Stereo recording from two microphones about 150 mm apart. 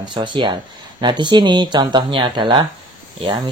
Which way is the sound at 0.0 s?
30° right (ahead or behind).